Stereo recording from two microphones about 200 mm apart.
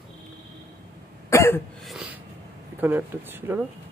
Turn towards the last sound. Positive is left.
turn(degrees=-10)  # may be behind; listen again after turning